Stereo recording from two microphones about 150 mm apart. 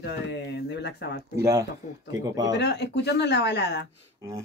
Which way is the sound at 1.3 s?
20° right (ahead or behind).